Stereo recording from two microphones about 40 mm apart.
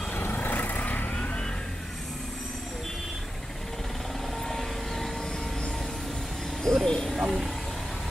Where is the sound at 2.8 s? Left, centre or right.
Centre.